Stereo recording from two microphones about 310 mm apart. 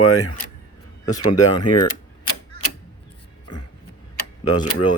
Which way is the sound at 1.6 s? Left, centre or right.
Left.